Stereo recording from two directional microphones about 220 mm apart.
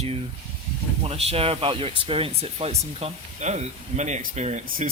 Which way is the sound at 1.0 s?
25° right (ahead or behind).